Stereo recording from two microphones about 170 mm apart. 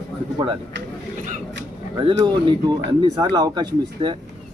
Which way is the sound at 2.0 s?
25° right (ahead or behind).